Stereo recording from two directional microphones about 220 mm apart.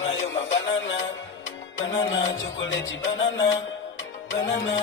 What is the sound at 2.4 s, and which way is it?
Music, 60° left (ahead or behind).